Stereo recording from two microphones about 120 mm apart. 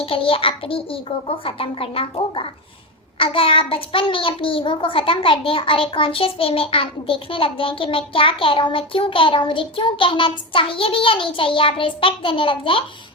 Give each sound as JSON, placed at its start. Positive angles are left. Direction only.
{"t": 0.0, "sound": "a child's voice", "side_deg": 50}